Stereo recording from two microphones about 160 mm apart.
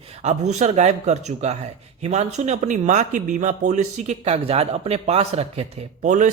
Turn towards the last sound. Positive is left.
turn(degrees=-50)  # may be behind; listen again after turning